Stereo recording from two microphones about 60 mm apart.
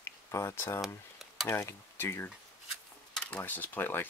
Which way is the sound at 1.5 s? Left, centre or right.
Left.